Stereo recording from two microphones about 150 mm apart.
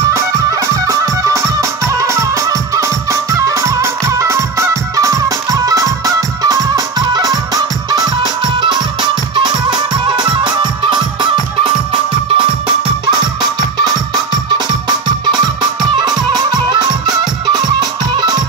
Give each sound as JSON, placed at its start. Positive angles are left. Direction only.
{"t": 0.1, "sound": "music", "side_deg": -20}